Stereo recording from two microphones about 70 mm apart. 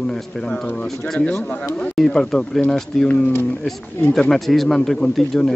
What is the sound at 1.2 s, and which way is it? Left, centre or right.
Speech, left.